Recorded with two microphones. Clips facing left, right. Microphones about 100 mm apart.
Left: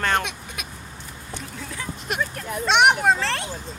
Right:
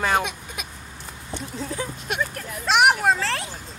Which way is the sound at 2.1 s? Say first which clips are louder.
Left 2 dB; centre (ahead or behind).